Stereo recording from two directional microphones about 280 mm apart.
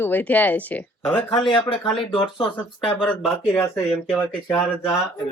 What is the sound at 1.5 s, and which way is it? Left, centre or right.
Speech, centre.